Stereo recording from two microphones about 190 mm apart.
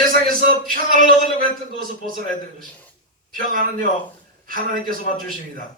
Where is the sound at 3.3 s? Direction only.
45° right (ahead or behind).